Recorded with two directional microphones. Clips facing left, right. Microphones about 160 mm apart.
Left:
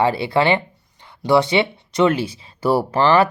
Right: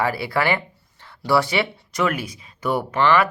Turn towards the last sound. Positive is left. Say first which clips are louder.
# left 3 dB
turn(degrees=30)  # may be behind; listen again after turning